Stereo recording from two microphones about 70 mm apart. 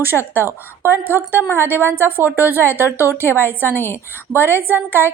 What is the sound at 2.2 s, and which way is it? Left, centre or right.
Speech, right.